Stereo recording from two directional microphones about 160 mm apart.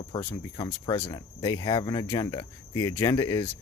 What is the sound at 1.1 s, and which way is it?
Cricket, 25° left (ahead or behind).